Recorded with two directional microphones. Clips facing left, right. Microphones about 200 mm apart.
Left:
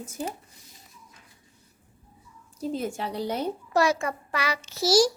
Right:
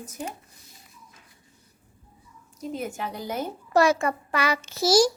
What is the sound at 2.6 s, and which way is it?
Speech, 30° left (ahead or behind).